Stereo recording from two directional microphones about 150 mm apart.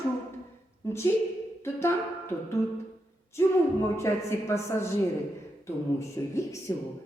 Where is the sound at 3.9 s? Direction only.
20° left (ahead or behind).